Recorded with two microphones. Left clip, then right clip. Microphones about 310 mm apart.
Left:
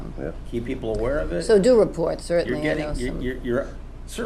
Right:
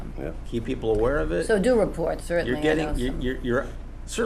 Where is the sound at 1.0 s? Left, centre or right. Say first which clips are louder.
Left 1 dB; right.